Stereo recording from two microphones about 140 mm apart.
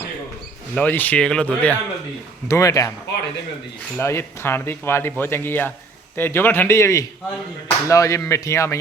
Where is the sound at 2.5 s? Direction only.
25° left (ahead or behind).